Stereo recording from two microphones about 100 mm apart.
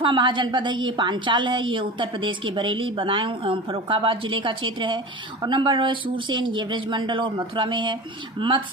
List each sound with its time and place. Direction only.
0.0 s a woman's voice: 55° right (ahead or behind)